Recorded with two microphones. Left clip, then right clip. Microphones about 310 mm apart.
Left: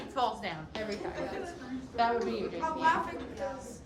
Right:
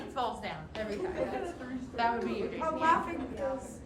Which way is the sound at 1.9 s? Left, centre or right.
Centre.